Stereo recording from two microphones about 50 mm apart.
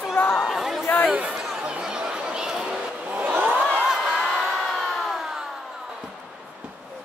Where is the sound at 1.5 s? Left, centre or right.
Right.